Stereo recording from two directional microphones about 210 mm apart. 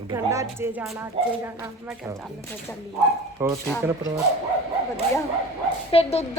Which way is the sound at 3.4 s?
10° right (ahead or behind).